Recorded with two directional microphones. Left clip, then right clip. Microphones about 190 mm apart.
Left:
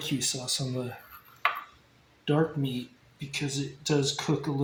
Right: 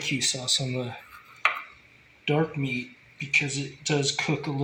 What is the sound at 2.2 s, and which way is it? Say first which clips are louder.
Speech: right 1 dB; 15° right (ahead or behind).